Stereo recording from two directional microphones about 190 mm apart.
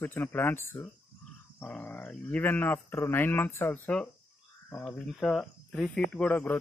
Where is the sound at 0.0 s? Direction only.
10° left (ahead or behind).